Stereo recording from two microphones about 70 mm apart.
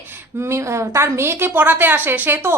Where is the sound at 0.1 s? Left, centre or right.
Right.